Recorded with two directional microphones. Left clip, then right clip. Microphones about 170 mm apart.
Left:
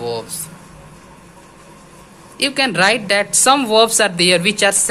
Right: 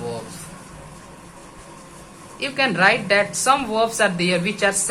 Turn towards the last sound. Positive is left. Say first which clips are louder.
# left 6 dB
turn(degrees=50)  # may be behind; listen again after turning